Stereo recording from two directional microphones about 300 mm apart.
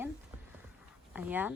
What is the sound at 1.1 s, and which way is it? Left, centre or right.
Speech, centre.